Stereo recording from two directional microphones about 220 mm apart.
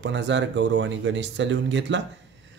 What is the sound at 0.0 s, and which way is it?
Speech, 55° right (ahead or behind).